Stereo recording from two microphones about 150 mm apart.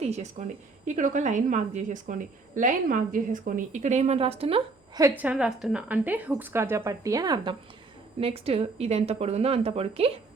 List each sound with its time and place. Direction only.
0.0 s a woman's voice: 50° right (ahead or behind)
5.1 s a woman's voice: 10° right (ahead or behind); by 7.5 s 25° right (ahead or behind)
8.2 s speech: 40° right (ahead or behind)